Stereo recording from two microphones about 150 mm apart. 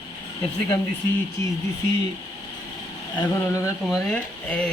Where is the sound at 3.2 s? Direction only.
20° left (ahead or behind).